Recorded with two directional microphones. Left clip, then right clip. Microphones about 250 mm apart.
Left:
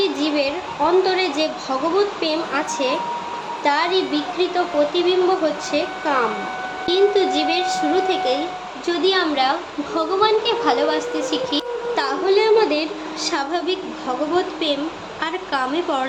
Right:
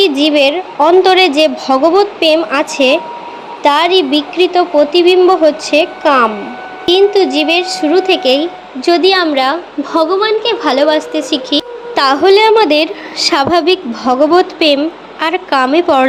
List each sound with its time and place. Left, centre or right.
0.0 s a woman's voice: right